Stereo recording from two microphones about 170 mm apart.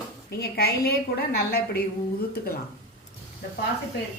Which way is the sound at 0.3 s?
70° left (ahead or behind).